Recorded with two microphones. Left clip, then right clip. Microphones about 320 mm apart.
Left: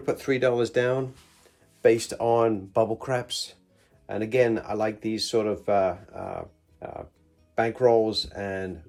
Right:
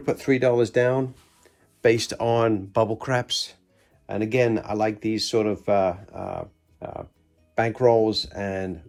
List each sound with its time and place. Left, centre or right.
0.0 s speech: right